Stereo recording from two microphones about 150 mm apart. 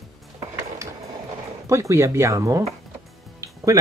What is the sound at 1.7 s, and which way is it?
Speech, 20° right (ahead or behind).